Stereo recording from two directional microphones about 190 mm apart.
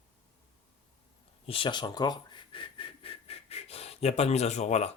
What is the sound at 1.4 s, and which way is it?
Speech, 25° left (ahead or behind).